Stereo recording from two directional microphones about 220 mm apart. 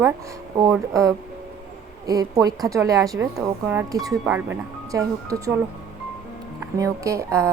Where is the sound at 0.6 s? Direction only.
15° right (ahead or behind).